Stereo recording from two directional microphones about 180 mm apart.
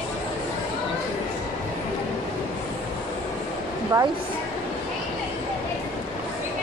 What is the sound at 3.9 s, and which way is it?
Speech, 20° right (ahead or behind).